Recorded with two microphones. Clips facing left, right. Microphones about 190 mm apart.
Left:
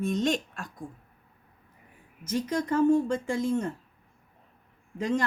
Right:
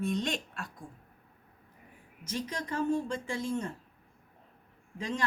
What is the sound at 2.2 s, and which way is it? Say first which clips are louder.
Speech: left 8 dB; 50° left (ahead or behind).